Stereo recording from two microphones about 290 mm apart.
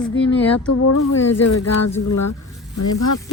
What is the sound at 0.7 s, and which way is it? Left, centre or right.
Speech, left.